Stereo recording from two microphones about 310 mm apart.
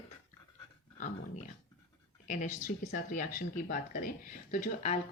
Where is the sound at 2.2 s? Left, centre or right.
Left.